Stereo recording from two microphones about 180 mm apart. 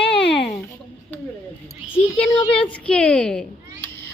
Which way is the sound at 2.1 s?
30° left (ahead or behind).